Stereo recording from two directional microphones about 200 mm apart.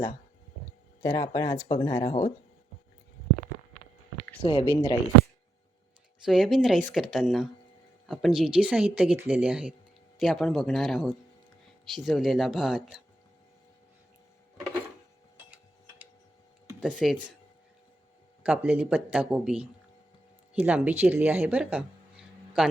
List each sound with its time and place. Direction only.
1.0 s speech: 15° left (ahead or behind)
4.4 s speech: 25° left (ahead or behind)
6.2 s a woman's voice: centre (ahead or behind)
16.8 s speech: centre (ahead or behind)
18.4 s a woman's voice: 10° right (ahead or behind)
20.7 s a woman's voice: 5° right (ahead or behind)